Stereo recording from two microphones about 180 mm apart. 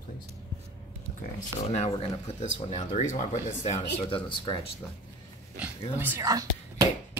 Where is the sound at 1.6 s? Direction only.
35° left (ahead or behind).